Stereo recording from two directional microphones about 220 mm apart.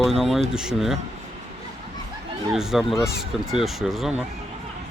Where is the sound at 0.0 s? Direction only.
Centre (ahead or behind).